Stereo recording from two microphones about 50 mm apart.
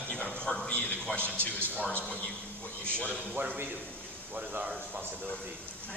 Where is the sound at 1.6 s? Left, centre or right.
Right.